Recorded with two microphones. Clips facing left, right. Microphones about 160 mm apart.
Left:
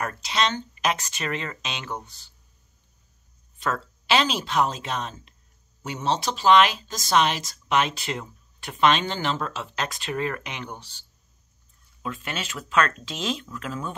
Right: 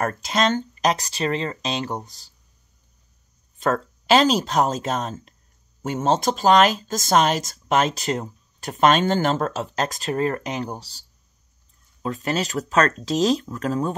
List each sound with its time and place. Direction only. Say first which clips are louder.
0.0 s speech: right 4 dB; 45° right (ahead or behind)
3.5 s speech: right 6 dB; 45° right (ahead or behind)